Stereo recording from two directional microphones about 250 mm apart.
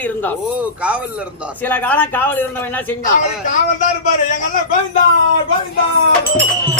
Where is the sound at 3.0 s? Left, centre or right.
Left.